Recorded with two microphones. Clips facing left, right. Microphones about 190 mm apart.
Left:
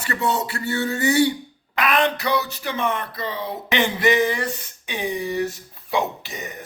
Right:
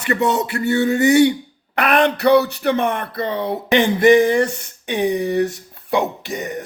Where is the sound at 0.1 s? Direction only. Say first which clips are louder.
Right 6 dB; 20° right (ahead or behind).